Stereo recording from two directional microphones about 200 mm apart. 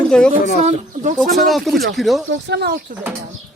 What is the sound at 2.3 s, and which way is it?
Speech, 55° right (ahead or behind).